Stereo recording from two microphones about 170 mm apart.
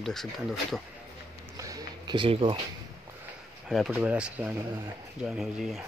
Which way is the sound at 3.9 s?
10° right (ahead or behind).